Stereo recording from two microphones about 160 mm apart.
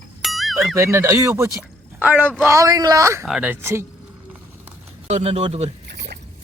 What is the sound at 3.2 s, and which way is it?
Speech, 5° right (ahead or behind).